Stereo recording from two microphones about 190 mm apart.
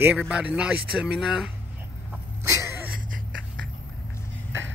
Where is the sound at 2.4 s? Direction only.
15° right (ahead or behind).